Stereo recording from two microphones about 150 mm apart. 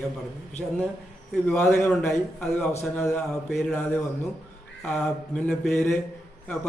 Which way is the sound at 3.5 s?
5° left (ahead or behind).